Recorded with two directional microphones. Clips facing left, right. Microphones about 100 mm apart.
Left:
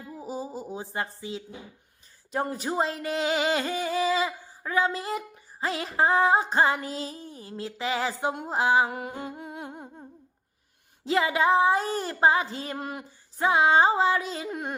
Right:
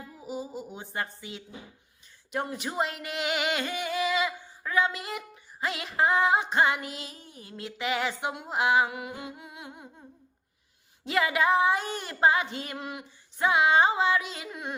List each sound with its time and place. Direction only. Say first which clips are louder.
0.2 s music: left 1 dB; 35° left (ahead or behind)
11.0 s music: left 2 dB; 30° left (ahead or behind); by 14.8 s 45° left (ahead or behind)